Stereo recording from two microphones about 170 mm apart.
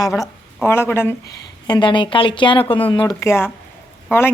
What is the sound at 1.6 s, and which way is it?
Speech, 25° left (ahead or behind).